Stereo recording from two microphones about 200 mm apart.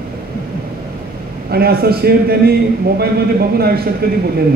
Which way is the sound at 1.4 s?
50° right (ahead or behind).